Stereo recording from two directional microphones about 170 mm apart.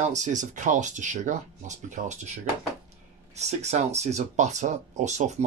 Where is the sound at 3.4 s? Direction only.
40° right (ahead or behind).